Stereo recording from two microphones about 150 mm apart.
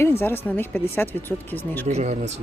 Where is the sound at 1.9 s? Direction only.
50° right (ahead or behind).